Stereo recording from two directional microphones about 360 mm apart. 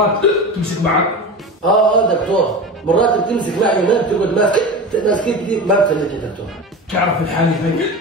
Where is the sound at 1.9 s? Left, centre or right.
Centre.